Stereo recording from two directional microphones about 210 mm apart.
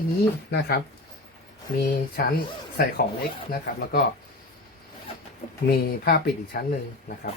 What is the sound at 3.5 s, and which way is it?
Speech, 45° left (ahead or behind).